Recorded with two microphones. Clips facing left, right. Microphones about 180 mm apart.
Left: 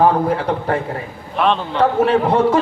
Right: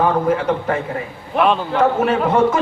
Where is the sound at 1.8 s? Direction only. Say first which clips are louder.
Left 2 dB; 35° left (ahead or behind).